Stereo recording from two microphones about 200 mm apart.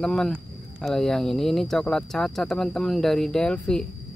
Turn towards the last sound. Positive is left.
turn(degrees=5)  # may be behind; listen again after turning